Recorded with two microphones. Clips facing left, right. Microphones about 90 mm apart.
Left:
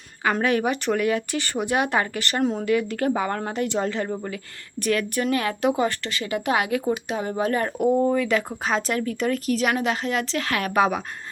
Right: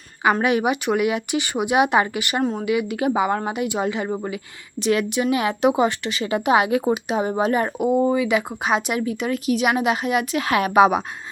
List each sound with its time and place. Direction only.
0.2 s a woman's voice: 15° right (ahead or behind)